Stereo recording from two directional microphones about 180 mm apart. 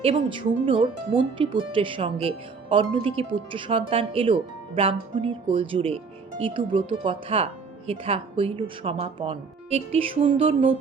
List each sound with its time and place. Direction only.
0.0 s speech: 30° right (ahead or behind)